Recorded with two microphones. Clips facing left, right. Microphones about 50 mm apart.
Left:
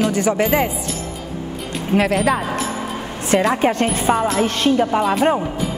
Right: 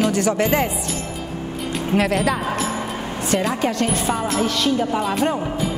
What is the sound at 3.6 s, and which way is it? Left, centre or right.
A woman's voice, left.